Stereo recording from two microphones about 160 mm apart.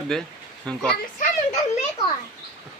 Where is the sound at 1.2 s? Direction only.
50° left (ahead or behind).